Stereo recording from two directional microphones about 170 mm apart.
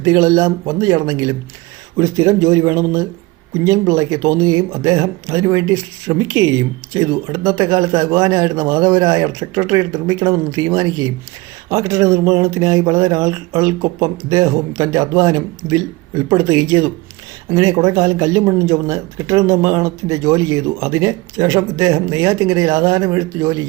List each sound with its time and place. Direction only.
0.0 s speech: 20° right (ahead or behind)